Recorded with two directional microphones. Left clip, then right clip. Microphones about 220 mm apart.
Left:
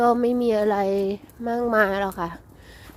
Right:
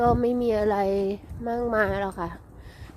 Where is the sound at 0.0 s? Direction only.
15° left (ahead or behind).